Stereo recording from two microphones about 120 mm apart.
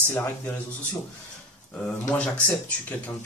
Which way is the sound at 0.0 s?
15° left (ahead or behind).